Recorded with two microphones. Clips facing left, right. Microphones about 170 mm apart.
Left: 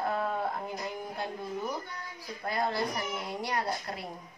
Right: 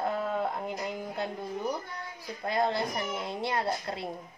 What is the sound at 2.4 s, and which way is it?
A child's voice, 20° right (ahead or behind).